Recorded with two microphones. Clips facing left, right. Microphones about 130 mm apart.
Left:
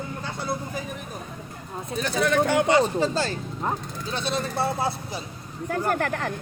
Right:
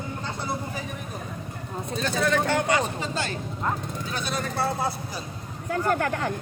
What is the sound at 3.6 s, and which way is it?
Speech, 25° left (ahead or behind).